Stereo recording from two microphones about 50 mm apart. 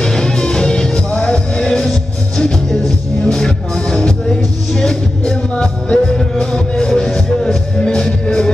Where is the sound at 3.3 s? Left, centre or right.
Centre.